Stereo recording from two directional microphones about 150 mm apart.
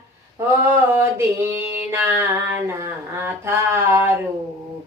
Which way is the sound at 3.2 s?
15° right (ahead or behind).